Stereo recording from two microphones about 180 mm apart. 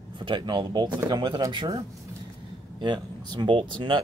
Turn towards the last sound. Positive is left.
turn(degrees=-30)  # may be behind; listen again after turning